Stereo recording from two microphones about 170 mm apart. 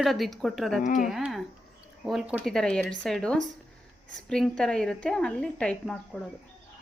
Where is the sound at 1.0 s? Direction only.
Centre (ahead or behind).